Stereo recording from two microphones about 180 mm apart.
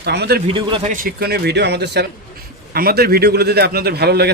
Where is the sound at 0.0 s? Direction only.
65° right (ahead or behind).